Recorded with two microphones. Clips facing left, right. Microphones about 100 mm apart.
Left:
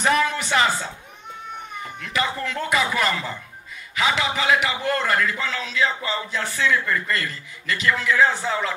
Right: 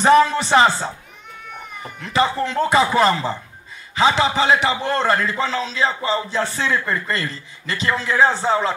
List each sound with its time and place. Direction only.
0.0 s a man's voice: 30° right (ahead or behind)